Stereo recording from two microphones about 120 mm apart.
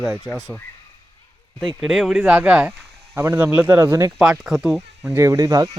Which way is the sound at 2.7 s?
20° right (ahead or behind).